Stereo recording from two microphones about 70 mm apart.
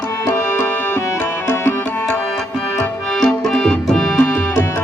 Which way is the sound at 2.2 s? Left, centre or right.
Centre.